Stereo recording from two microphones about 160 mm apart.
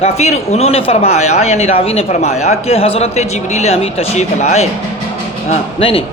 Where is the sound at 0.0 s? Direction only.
45° left (ahead or behind).